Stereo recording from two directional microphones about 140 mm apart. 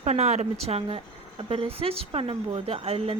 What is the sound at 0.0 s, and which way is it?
A woman's voice, 55° right (ahead or behind).